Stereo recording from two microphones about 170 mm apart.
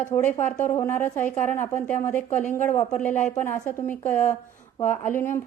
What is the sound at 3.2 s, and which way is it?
A woman's voice, 10° left (ahead or behind).